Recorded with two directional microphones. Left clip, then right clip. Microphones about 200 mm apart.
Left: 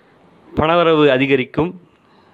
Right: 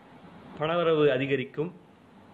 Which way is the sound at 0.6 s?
50° left (ahead or behind).